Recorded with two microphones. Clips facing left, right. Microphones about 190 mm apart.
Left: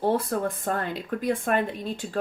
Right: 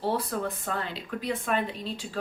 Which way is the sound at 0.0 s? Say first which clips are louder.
Left 4 dB; 50° left (ahead or behind).